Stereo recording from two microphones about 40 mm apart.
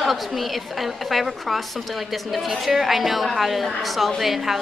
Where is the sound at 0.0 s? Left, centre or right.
Centre.